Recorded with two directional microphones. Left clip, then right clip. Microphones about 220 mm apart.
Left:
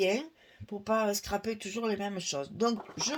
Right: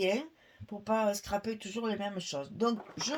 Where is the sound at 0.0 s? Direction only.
35° left (ahead or behind).